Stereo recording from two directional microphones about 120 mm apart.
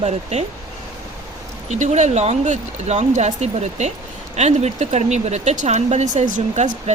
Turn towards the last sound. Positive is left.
turn(degrees=-80)